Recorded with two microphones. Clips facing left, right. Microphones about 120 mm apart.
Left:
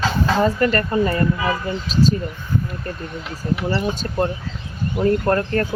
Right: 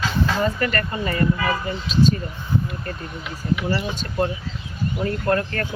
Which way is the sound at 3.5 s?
40° left (ahead or behind).